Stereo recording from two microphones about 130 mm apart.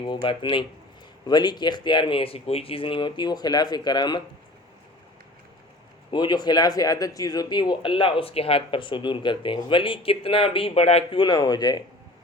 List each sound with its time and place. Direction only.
0.0 s speech: 40° left (ahead or behind)
6.1 s speech: 35° left (ahead or behind); by 11.2 s 55° left (ahead or behind)
11.2 s speech: 30° left (ahead or behind)